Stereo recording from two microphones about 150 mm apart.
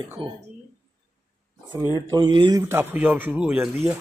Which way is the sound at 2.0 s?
25° right (ahead or behind).